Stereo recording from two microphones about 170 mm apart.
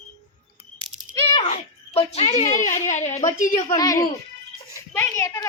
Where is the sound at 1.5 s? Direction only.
35° left (ahead or behind).